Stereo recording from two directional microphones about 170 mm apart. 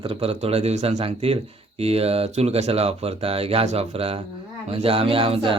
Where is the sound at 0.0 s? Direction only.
35° right (ahead or behind).